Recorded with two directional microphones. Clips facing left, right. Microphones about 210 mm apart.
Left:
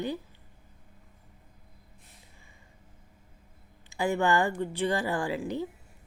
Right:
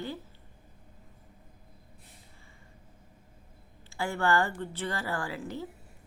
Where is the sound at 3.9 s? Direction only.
15° left (ahead or behind).